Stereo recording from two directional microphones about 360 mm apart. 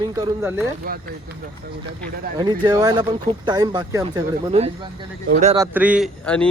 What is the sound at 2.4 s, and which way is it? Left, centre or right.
Speech, centre.